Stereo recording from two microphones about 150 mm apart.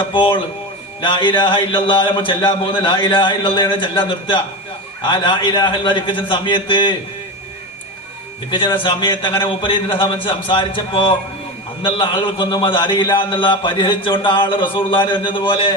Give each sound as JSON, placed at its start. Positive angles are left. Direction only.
{"t": 0.0, "sound": "a man's voice", "side_deg": 35}
{"t": 8.4, "sound": "a man's voice", "side_deg": 35}